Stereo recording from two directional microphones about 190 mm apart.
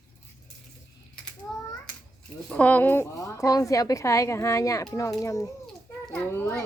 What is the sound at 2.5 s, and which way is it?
A woman's voice, 5° left (ahead or behind).